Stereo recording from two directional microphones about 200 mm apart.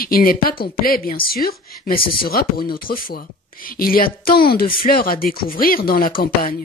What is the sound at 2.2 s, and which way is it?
A woman's voice, 50° left (ahead or behind).